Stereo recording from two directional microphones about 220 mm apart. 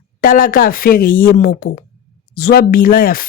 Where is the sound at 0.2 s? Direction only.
40° left (ahead or behind).